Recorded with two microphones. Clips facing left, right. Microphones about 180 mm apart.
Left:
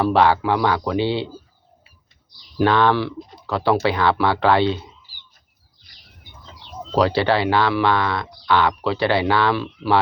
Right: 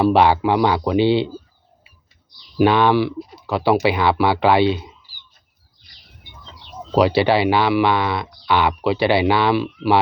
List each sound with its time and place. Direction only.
0.0 s speech: 15° right (ahead or behind)
2.6 s speech: 15° right (ahead or behind)
6.9 s speech: 15° right (ahead or behind)